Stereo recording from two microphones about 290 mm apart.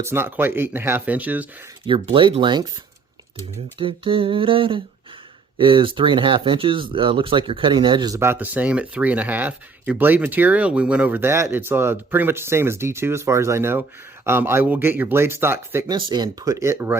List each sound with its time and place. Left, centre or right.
0.0 s speech: centre
1.9 s speech: centre
3.8 s speech: centre